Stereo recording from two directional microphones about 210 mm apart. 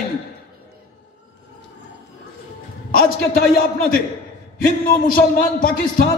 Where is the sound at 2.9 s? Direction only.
40° left (ahead or behind).